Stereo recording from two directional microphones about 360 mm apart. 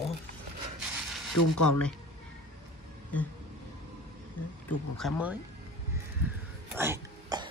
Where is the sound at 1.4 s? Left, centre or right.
Left.